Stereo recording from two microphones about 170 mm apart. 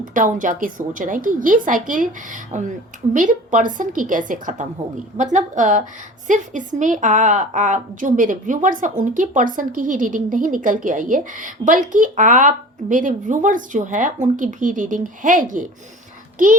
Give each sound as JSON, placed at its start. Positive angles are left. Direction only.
{"t": 0.0, "sound": "a woman's voice", "side_deg": -50}